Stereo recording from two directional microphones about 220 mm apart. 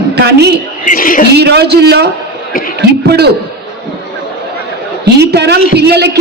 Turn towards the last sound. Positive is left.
turn(degrees=-50)  # may be behind; listen again after turning